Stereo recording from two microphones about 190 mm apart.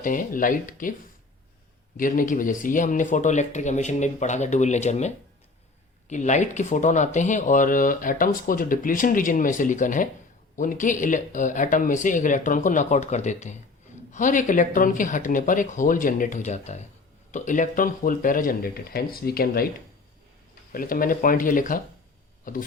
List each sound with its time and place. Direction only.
0.0 s speech: 45° left (ahead or behind)
2.0 s speech: 45° left (ahead or behind)
20.7 s speech: 50° left (ahead or behind)